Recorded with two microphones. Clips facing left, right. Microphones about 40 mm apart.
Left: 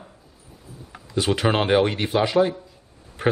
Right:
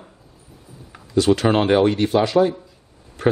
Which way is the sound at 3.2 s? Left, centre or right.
Left.